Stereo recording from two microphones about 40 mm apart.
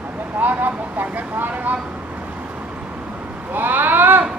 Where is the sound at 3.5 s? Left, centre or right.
Right.